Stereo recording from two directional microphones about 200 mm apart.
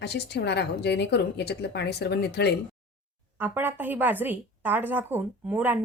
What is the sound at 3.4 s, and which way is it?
A woman's voice, 10° right (ahead or behind).